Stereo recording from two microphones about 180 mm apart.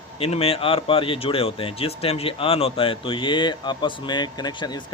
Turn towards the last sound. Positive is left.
turn(degrees=25)  # may be behind; listen again after turning